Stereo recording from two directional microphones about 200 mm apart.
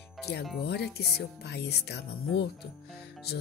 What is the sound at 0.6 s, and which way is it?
Speech, 55° left (ahead or behind).